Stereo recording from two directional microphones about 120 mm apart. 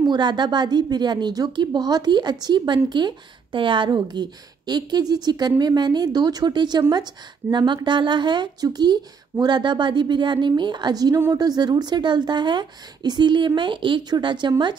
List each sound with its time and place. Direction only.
0.0 s a woman's voice: 40° right (ahead or behind)